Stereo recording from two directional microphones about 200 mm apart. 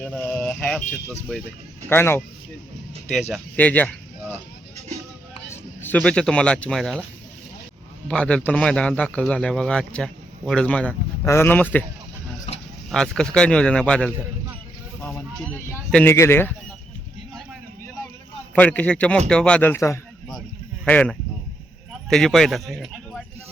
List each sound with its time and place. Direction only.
0.0 s a sound: 5° left (ahead or behind)
1.9 s a man's voice: 10° left (ahead or behind)
3.1 s speech: centre (ahead or behind)
5.5 s speech: 10° left (ahead or behind)
8.0 s speech: 5° left (ahead or behind)
12.5 s a sound: 30° left (ahead or behind)
12.9 s speech: 5° left (ahead or behind)
18.5 s a man's voice: 5° left (ahead or behind)